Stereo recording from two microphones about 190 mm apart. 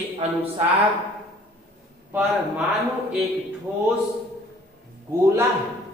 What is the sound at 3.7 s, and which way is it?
Speech, 10° right (ahead or behind).